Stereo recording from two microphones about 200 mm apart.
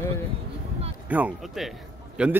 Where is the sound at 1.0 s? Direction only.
10° right (ahead or behind).